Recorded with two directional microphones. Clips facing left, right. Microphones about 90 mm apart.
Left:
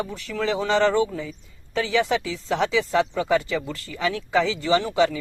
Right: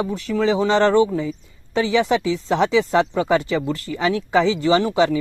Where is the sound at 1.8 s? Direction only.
15° right (ahead or behind).